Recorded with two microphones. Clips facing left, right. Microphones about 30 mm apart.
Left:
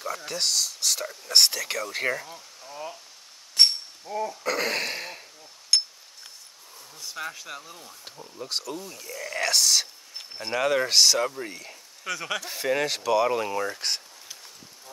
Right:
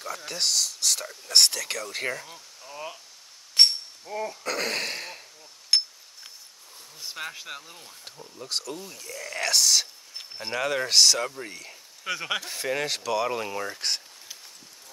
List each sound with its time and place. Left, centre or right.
0.0 s speech: centre
2.2 s a sound: centre
4.1 s speech: centre
4.4 s speech: centre
5.7 s a sound: centre
7.2 s speech: centre
12.1 s speech: centre
12.4 s speech: centre